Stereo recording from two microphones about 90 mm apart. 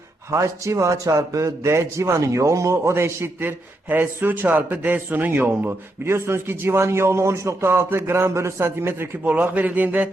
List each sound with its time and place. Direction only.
0.3 s a man's voice: 35° right (ahead or behind); by 10.1 s 20° right (ahead or behind)